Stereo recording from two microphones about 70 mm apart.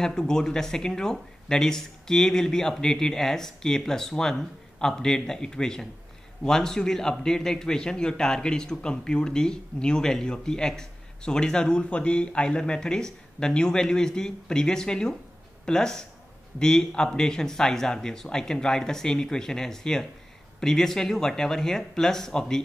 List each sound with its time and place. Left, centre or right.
0.0 s a man's voice: centre